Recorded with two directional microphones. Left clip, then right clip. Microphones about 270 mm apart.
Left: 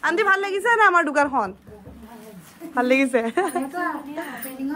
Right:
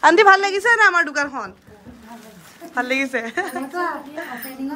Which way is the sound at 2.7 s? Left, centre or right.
Centre.